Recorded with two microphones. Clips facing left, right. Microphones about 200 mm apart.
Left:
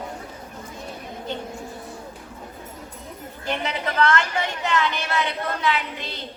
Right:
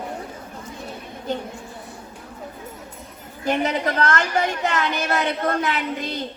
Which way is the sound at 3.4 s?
45° right (ahead or behind).